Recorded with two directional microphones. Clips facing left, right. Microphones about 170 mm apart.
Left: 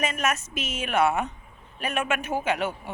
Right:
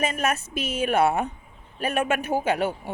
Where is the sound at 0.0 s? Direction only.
30° right (ahead or behind).